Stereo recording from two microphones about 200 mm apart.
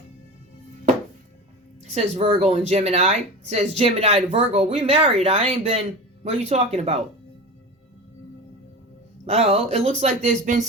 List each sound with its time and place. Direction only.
1.8 s speech: 35° right (ahead or behind)
9.2 s speech: 30° right (ahead or behind)